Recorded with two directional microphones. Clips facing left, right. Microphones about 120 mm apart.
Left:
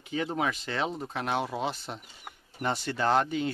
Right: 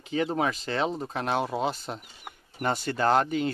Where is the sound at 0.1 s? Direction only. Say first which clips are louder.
Right 3 dB; 40° right (ahead or behind).